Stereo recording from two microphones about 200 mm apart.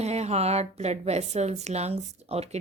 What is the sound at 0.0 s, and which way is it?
A woman's voice, 35° right (ahead or behind).